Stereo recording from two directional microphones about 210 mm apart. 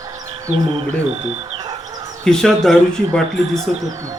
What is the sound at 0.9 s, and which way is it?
Chicken, 30° right (ahead or behind).